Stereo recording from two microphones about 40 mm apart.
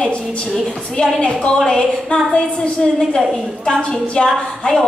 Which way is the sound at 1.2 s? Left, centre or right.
Left.